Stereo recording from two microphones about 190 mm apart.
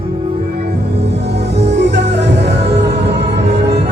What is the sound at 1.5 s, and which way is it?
Music, 65° right (ahead or behind).